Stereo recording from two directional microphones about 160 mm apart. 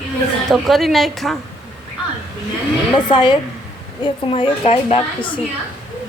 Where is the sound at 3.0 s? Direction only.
30° left (ahead or behind).